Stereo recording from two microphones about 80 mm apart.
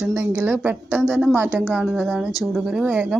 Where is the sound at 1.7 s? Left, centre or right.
Centre.